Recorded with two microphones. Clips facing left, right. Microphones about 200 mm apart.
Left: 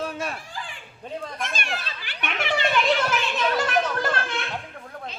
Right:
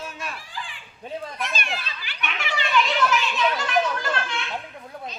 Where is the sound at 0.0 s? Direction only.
55° left (ahead or behind).